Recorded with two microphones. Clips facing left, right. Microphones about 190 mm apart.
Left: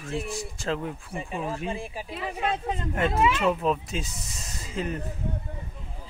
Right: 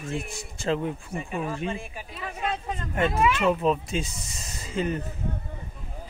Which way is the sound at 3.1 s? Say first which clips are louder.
Left 1 dB; 25° left (ahead or behind).